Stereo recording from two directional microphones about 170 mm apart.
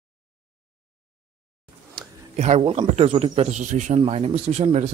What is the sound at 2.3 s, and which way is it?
Speech, 40° right (ahead or behind).